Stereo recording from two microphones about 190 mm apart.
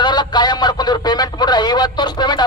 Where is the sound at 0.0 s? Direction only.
20° left (ahead or behind).